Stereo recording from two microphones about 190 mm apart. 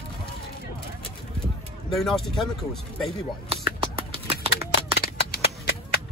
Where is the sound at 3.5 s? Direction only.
30° right (ahead or behind).